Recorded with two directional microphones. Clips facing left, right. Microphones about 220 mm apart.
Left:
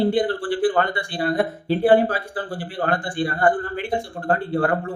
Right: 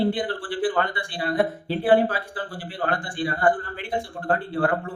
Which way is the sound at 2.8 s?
45° left (ahead or behind).